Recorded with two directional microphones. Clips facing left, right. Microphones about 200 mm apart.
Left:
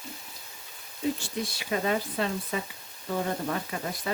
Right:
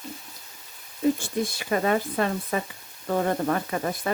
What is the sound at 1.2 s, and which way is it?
Speech, 50° right (ahead or behind).